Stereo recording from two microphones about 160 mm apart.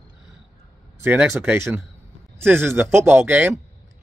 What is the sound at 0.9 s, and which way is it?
Speech, 15° right (ahead or behind).